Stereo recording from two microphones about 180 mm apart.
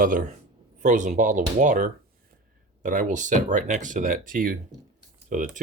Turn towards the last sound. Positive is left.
turn(degrees=-45)  # may be behind; listen again after turning